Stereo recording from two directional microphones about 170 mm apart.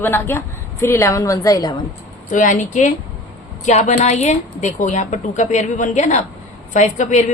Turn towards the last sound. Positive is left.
turn(degrees=45)  # may be behind; listen again after turning